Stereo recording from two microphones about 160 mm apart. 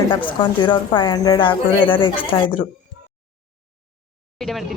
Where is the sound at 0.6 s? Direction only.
30° left (ahead or behind).